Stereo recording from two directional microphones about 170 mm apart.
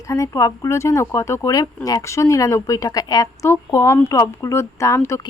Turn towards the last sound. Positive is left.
turn(degrees=15)  # may be behind; listen again after turning